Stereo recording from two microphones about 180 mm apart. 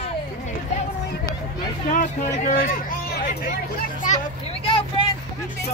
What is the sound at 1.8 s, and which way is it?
Hubbub, 45° left (ahead or behind).